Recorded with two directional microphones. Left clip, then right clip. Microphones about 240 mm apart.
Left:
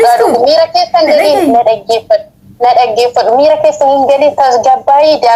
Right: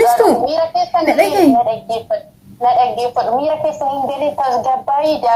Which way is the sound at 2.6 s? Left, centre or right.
Left.